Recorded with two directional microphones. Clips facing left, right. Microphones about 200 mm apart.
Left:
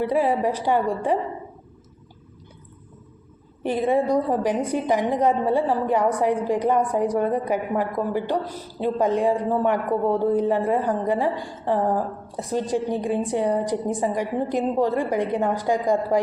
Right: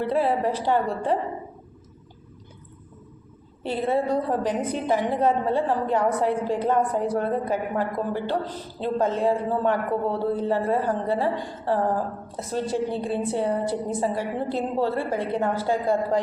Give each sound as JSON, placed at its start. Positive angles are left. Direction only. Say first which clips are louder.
{"t": 0.0, "sound": "a woman's voice", "louder": "left 2 dB", "side_deg": 10}
{"t": 3.6, "sound": "a woman's voice", "louder": "left 3 dB", "side_deg": 15}